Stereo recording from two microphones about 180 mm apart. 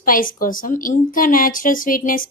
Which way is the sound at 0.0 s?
50° left (ahead or behind).